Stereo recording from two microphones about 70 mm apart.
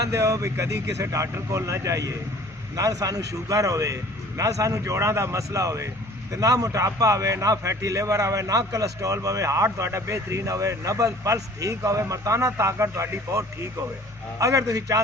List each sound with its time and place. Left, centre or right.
0.1 s a man's voice: right